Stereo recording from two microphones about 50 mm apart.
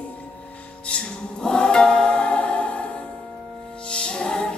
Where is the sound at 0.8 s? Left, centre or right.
Centre.